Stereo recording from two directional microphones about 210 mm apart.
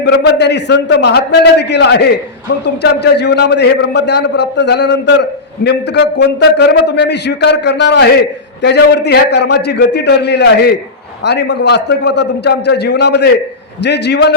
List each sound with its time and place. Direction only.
0.0 s a man's voice: 55° left (ahead or behind)